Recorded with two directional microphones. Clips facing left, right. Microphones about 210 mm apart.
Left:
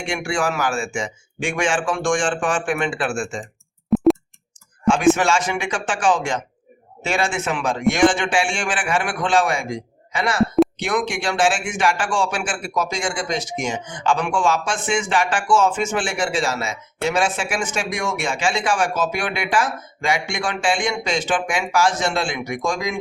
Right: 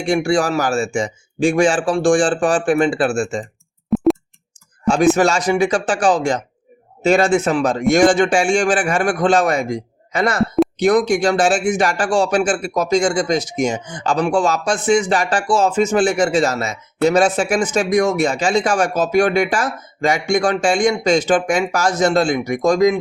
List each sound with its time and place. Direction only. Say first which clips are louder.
0.0 s speech: right 7 dB; 35° right (ahead or behind)
3.8 s a sound: even; centre (ahead or behind)
4.9 s speech: right 2 dB; 40° right (ahead or behind)